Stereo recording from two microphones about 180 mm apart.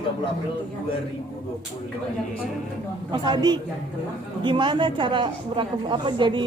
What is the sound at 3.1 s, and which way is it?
A woman's voice, 25° right (ahead or behind).